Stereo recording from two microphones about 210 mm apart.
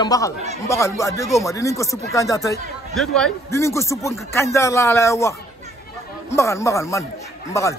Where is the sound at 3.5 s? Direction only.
15° left (ahead or behind).